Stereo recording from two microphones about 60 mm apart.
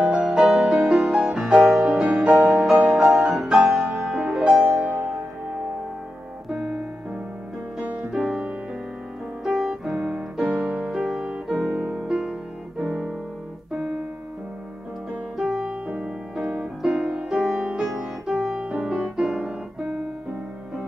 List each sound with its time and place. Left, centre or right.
0.2 s music: centre
4.8 s music: right
6.5 s music: centre
8.0 s music: centre
9.4 s piano: centre
10.9 s music: centre
11.4 s piano: centre
12.0 s music: centre
15.3 s music: centre
15.6 s music: centre
17.8 s music: centre